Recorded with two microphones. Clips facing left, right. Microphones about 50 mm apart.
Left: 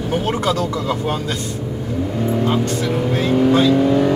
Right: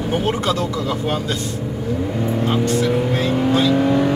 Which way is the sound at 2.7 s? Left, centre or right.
Right.